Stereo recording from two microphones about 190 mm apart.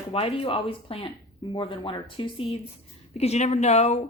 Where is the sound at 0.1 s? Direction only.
30° left (ahead or behind).